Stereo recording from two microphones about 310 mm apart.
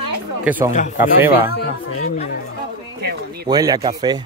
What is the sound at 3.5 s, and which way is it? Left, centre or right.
Speech, centre.